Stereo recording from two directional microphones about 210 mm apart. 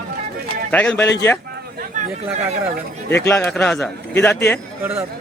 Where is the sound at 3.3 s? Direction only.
Centre (ahead or behind).